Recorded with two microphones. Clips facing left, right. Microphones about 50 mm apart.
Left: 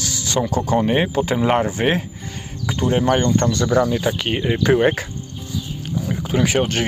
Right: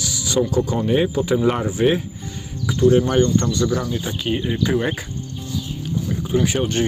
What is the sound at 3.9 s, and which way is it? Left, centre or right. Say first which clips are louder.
Speech: left 3 dB; left.